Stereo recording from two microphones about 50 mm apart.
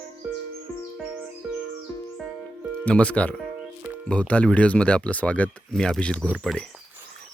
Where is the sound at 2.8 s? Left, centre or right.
Left.